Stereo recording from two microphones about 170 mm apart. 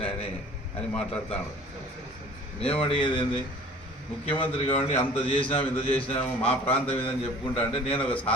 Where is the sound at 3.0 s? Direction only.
30° left (ahead or behind).